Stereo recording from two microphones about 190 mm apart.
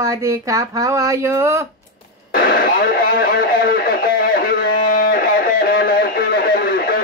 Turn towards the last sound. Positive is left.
turn(degrees=50)  # may be behind; listen again after turning